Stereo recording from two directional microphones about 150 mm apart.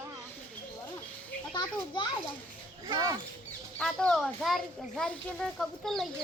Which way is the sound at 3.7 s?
5° left (ahead or behind).